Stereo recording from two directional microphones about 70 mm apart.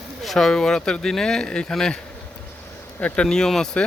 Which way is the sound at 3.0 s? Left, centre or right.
Centre.